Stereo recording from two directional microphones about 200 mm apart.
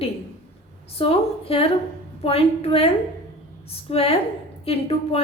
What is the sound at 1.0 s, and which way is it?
A woman's voice, 30° left (ahead or behind).